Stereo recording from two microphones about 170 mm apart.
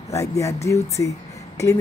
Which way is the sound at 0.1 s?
20° left (ahead or behind).